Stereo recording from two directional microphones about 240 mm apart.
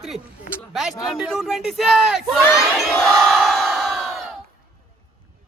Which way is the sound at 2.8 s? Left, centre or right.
Centre.